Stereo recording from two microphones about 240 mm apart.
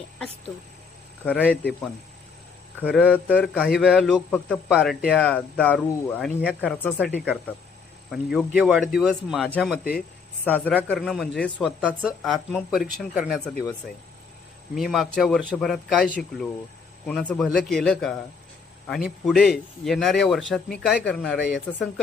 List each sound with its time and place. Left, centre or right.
1.2 s a man's voice: centre
2.8 s a man's voice: centre
6.8 s a man's voice: centre
9.7 s speech: left
10.4 s a man's voice: centre
14.8 s a man's voice: centre
19.2 s a man's voice: centre